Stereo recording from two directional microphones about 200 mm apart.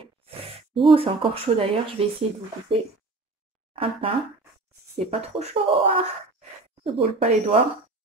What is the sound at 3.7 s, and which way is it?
Speech, 25° right (ahead or behind).